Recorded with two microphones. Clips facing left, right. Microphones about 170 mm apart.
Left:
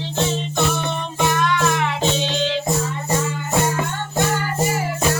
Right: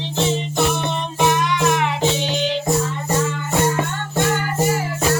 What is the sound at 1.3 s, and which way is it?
Music, 15° right (ahead or behind).